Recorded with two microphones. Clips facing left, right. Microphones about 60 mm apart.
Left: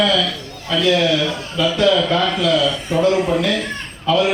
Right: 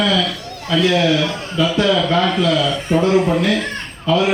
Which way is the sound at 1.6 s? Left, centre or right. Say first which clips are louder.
Even; right.